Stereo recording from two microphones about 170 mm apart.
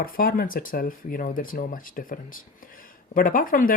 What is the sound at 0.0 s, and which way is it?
Speech, 55° left (ahead or behind).